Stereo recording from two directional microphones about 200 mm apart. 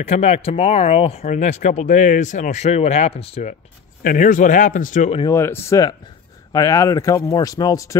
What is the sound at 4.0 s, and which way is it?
Speech, 45° left (ahead or behind).